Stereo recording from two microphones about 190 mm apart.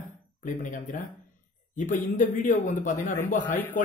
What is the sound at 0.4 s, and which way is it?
A man's voice, 45° left (ahead or behind).